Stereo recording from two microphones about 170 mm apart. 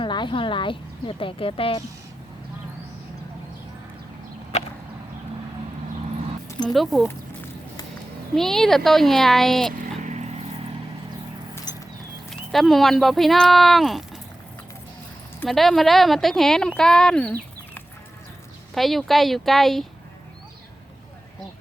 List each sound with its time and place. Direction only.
0.0 s speech: 30° left (ahead or behind)
4.5 s whip: 40° left (ahead or behind)
6.7 s speech: centre (ahead or behind)
8.4 s speech: centre (ahead or behind)
10.0 s vehicle: 45° right (ahead or behind)
12.3 s speech: centre (ahead or behind)
15.4 s speech: centre (ahead or behind)
18.7 s speech: centre (ahead or behind)